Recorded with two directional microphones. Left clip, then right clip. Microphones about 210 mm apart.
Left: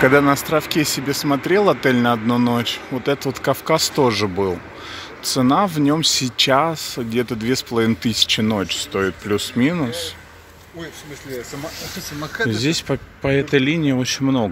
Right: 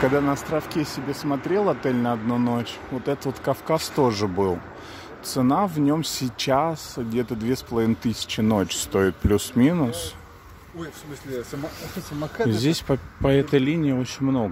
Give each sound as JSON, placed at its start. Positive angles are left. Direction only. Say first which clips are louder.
{"t": 0.0, "sound": "speech", "louder": "left 7 dB", "side_deg": 5}
{"t": 11.8, "sound": "speech", "louder": "left 3 dB", "side_deg": -50}
{"t": 12.4, "sound": "speech", "louder": "left 3 dB", "side_deg": -10}